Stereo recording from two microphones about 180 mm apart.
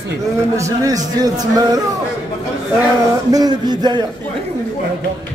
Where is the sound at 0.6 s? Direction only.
20° right (ahead or behind).